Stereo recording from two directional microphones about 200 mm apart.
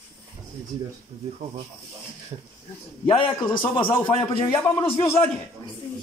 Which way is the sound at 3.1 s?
25° left (ahead or behind).